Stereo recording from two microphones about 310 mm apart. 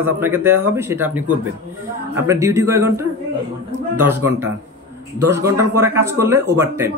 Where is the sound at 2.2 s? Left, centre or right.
Centre.